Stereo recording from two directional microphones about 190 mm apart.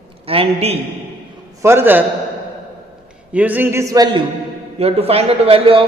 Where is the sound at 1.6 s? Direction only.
15° right (ahead or behind).